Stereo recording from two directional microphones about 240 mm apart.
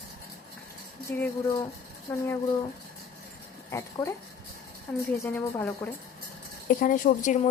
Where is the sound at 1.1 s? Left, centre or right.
Centre.